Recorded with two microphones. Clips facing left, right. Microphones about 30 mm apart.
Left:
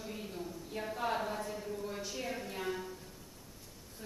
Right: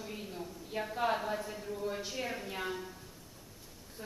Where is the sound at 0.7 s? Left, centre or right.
Right.